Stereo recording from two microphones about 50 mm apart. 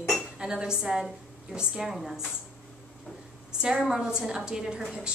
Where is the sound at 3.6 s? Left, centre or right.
Centre.